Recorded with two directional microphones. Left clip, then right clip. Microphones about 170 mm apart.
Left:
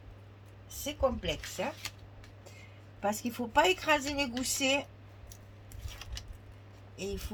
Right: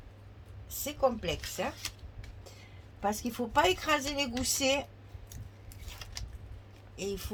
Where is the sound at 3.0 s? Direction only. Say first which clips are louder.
Right 1 dB; 30° right (ahead or behind).